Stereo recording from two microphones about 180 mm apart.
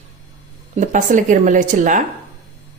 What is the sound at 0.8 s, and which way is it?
A woman's voice, 45° right (ahead or behind).